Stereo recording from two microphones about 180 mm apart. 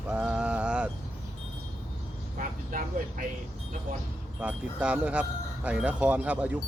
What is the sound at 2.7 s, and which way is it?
Speech, 50° right (ahead or behind).